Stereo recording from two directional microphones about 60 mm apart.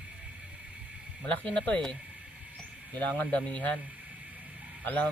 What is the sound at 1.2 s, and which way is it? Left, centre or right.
Mantra, left.